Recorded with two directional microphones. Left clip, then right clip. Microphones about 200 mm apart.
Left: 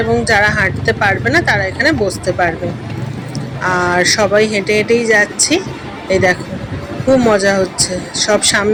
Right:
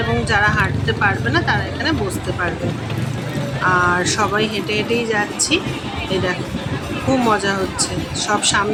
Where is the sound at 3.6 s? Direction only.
20° left (ahead or behind).